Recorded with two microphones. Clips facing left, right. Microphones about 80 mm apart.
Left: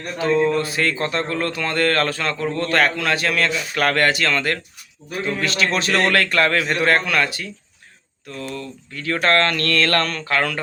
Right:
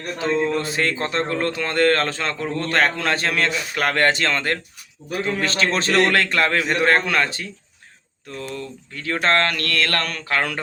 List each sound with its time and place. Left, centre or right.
0.2 s a man's voice: right; by 10.3 s centre
10.3 s a man's voice: right